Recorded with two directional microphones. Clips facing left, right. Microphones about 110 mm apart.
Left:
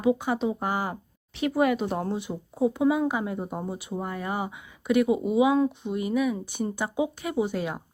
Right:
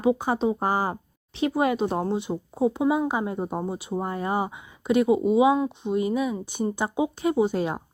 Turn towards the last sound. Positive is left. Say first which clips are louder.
# right 4 dB
turn(degrees=-30)  # may be behind; listen again after turning